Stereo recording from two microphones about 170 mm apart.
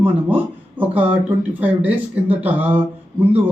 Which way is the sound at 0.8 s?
10° right (ahead or behind).